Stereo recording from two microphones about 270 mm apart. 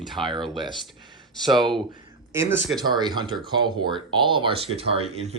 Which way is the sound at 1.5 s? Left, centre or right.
Centre.